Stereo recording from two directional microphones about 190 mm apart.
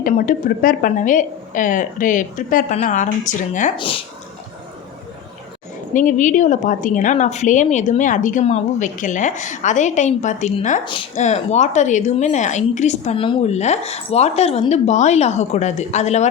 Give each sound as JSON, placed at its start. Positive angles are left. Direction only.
{"t": 0.0, "sound": "a woman's voice", "side_deg": 45}
{"t": 3.8, "sound": "speech", "side_deg": 30}
{"t": 5.9, "sound": "a woman's voice", "side_deg": 45}